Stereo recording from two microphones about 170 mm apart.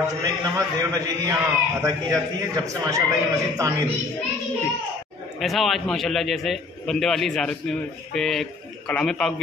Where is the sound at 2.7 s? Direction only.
20° right (ahead or behind).